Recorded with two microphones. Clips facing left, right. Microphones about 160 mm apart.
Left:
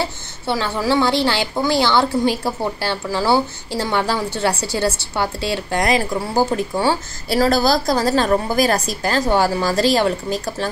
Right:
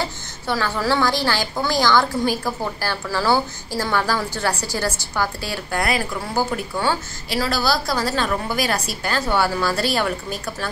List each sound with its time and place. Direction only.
0.0 s a sound: 25° left (ahead or behind)
1.2 s a woman's voice: 20° left (ahead or behind)
7.3 s a woman's voice: 45° left (ahead or behind)